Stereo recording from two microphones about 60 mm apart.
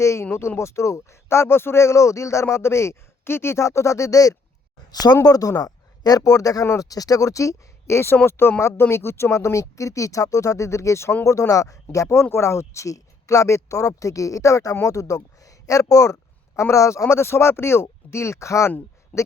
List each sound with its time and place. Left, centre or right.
0.0 s speech: left
5.2 s speech: left
6.7 s speech: left
12.2 s speech: left
16.6 s speech: left
19.1 s speech: left